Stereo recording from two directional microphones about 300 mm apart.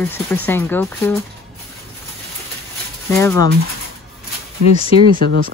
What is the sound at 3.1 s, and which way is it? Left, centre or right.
Speech, centre.